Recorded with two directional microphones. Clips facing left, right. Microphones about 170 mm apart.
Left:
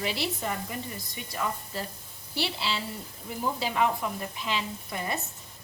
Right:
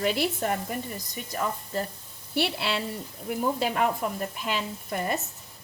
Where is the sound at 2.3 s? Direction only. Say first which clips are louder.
Right 4 dB; 55° right (ahead or behind).